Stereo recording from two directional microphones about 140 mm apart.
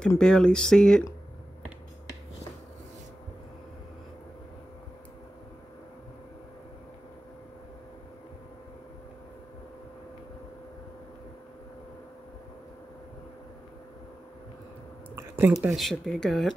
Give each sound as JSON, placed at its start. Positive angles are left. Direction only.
{"t": 0.2, "sound": "speech", "side_deg": 5}
{"t": 15.1, "sound": "a sound", "side_deg": -15}
{"t": 15.6, "sound": "speech", "side_deg": 0}